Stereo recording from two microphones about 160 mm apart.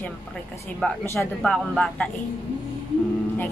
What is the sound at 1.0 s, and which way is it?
Speech, 15° left (ahead or behind).